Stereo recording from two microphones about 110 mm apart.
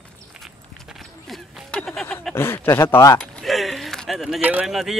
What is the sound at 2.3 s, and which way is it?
Speech, 20° left (ahead or behind).